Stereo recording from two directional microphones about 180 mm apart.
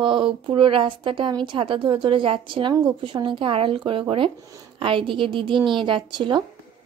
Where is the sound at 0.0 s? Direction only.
25° right (ahead or behind).